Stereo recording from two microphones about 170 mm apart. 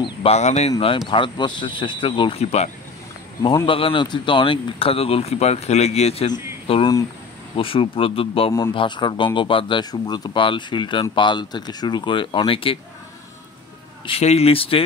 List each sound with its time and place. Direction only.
0.0 s speech: 35° left (ahead or behind)
6.7 s speech: 25° left (ahead or behind)
14.0 s speech: 35° left (ahead or behind)